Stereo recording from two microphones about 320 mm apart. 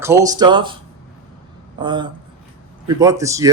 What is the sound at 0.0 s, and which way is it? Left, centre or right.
Speech, centre.